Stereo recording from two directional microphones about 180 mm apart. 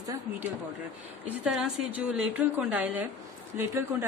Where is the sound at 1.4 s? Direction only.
5° right (ahead or behind).